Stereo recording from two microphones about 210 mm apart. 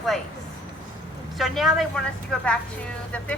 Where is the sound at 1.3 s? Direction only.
Centre (ahead or behind).